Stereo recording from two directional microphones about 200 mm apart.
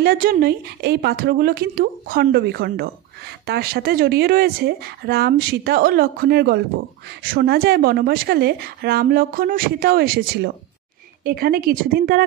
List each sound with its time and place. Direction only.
0.0 s speech: 45° right (ahead or behind)